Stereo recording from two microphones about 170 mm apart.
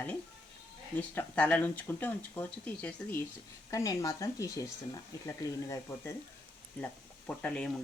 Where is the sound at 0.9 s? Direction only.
10° left (ahead or behind).